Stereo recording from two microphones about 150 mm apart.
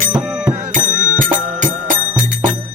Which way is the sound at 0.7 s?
60° right (ahead or behind).